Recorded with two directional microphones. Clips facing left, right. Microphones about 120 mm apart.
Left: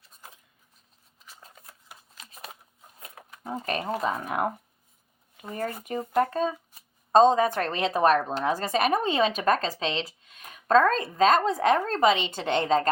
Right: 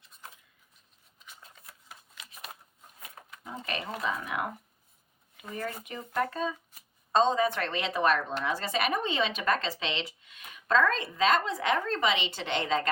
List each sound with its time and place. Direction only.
3.2 s a woman's voice: 40° left (ahead or behind)